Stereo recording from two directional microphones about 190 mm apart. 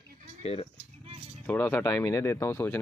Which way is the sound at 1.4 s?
10° left (ahead or behind).